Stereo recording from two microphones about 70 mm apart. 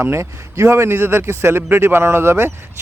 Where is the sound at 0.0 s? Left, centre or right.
Right.